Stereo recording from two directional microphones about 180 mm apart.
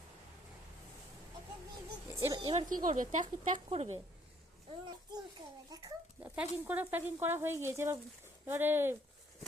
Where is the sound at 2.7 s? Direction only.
45° right (ahead or behind).